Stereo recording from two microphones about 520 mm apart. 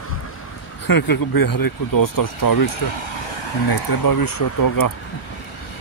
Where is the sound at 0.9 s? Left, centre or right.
Left.